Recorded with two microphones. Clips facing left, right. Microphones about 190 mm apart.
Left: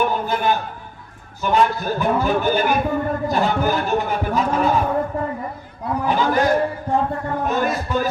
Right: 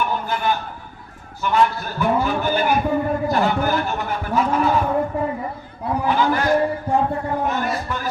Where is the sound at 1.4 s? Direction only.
20° left (ahead or behind).